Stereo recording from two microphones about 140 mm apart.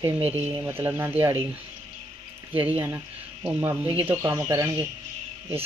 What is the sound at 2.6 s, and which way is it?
Speech, 15° right (ahead or behind).